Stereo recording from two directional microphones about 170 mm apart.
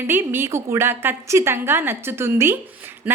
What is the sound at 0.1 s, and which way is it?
A woman's voice, 15° right (ahead or behind).